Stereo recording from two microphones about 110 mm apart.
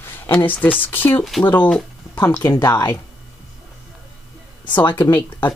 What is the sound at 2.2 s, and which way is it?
Speech, 30° left (ahead or behind).